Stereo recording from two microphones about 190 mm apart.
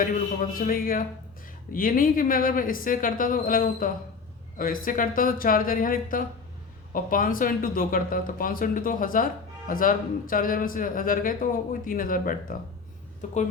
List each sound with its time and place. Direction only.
0.6 s speech: 50° left (ahead or behind)